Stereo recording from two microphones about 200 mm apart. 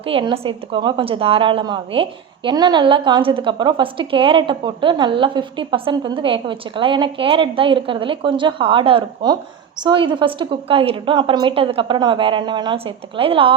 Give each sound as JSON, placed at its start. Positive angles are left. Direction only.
{"t": 0.0, "sound": "a woman's voice", "side_deg": -25}